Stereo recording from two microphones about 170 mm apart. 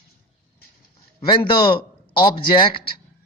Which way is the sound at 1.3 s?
30° left (ahead or behind).